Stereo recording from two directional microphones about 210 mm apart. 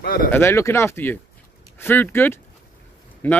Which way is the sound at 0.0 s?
45° left (ahead or behind).